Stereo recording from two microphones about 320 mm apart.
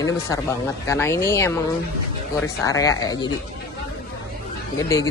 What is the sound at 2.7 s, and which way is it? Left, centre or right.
Speech, centre.